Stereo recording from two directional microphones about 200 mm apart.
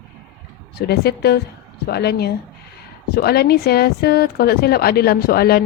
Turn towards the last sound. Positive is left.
turn(degrees=50)  # may be behind; listen again after turning